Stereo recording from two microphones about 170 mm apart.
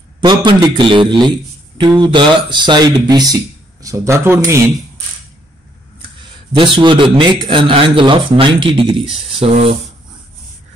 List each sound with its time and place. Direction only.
0.2 s speech: 25° right (ahead or behind)
6.5 s speech: 30° right (ahead or behind)